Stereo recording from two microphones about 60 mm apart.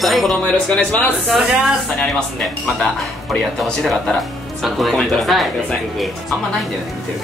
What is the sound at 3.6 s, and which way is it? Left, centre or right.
Speech, centre.